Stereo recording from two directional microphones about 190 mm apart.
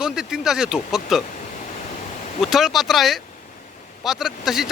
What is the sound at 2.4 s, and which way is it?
Speech, centre (ahead or behind).